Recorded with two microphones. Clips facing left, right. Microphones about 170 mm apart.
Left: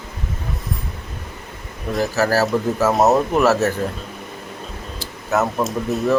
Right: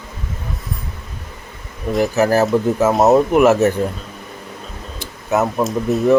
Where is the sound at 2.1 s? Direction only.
20° right (ahead or behind).